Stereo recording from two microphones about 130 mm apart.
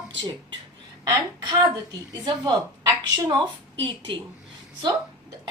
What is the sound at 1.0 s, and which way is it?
Speech, 30° right (ahead or behind).